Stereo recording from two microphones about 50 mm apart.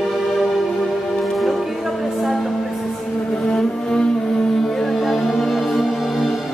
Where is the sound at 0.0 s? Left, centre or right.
Centre.